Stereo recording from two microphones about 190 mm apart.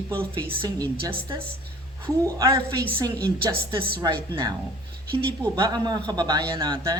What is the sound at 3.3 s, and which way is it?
Speech, 55° right (ahead or behind).